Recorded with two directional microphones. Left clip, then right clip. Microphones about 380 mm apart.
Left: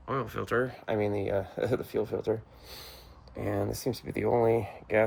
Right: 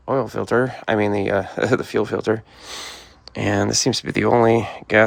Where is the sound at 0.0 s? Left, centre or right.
Centre.